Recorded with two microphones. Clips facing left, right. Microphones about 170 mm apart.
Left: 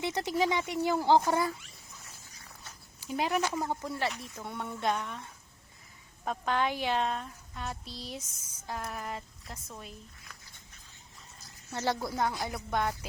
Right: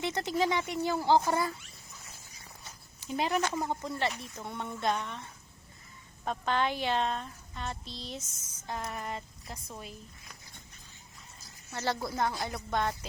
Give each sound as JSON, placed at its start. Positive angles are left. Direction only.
{"t": 0.0, "sound": "speech", "side_deg": 15}
{"t": 3.0, "sound": "a woman's voice", "side_deg": 10}
{"t": 11.7, "sound": "speech", "side_deg": 15}